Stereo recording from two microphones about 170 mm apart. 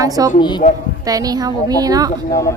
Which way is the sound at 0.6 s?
45° left (ahead or behind).